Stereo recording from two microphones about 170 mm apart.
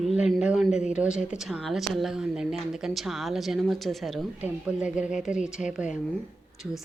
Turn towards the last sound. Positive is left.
turn(degrees=0)  # may be behind; listen again after turning